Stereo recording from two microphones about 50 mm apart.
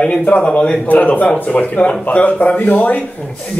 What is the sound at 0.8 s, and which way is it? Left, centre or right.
A man's voice, left.